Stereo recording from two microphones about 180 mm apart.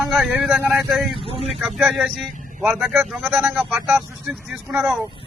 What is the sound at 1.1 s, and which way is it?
Speech, 30° right (ahead or behind).